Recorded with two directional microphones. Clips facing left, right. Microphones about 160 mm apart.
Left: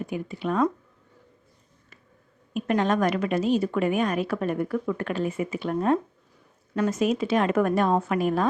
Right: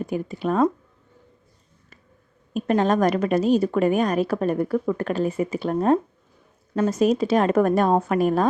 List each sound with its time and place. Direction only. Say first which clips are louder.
0.0 s a woman's voice: right 4 dB; 40° right (ahead or behind)
2.5 s a woman's voice: right 3 dB; 35° right (ahead or behind)